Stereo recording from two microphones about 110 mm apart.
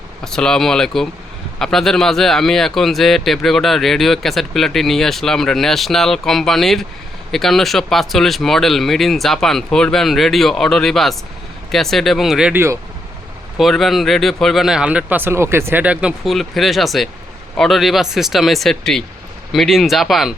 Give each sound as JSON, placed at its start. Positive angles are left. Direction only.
{"t": 0.3, "sound": "speech", "side_deg": 5}
{"t": 12.5, "sound": "speech", "side_deg": -25}
{"t": 13.6, "sound": "speech", "side_deg": 0}
{"t": 15.8, "sound": "speech", "side_deg": -10}